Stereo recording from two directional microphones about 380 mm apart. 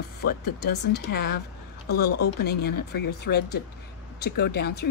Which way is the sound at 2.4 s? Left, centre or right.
Left.